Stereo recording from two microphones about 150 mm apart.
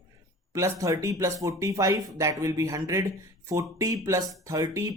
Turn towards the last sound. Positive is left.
turn(degrees=-20)  # may be behind; listen again after turning